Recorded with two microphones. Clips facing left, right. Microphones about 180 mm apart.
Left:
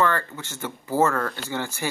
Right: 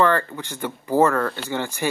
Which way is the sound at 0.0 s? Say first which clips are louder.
Right 4 dB; 15° right (ahead or behind).